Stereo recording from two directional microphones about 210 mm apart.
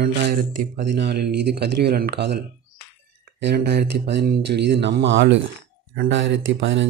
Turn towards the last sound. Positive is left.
turn(degrees=-60)  # may be behind; listen again after turning